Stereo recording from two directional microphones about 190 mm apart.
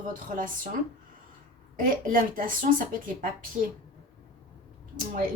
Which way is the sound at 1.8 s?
45° right (ahead or behind).